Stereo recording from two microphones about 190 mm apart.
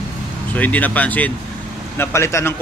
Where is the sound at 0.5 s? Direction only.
10° left (ahead or behind).